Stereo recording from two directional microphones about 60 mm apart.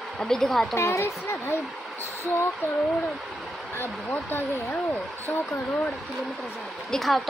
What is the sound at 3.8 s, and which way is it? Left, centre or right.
Speech, left.